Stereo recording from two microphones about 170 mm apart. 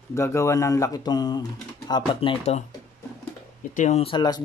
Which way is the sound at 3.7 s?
45° left (ahead or behind).